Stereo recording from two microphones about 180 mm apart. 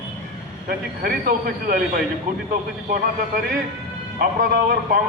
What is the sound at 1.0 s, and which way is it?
Speech, 55° right (ahead or behind).